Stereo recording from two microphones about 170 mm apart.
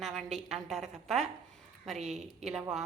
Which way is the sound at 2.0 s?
45° right (ahead or behind).